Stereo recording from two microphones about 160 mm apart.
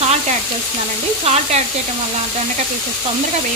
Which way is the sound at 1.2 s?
40° right (ahead or behind).